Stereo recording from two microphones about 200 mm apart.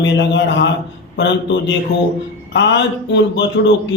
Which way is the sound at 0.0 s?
65° left (ahead or behind).